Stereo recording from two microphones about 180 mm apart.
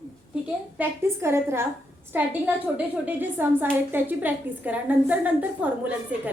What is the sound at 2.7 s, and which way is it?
A woman's voice, 10° right (ahead or behind).